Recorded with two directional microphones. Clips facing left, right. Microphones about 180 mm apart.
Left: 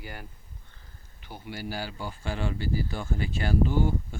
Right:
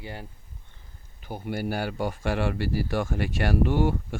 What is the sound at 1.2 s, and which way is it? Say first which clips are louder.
A man's voice: right 7 dB; 50° right (ahead or behind).